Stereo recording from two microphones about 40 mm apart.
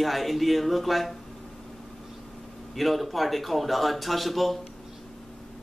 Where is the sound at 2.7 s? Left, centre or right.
Centre.